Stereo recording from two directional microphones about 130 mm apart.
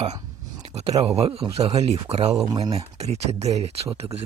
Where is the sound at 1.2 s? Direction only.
50° right (ahead or behind).